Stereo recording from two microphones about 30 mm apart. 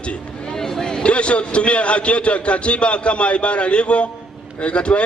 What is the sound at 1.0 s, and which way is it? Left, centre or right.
A man's voice, left.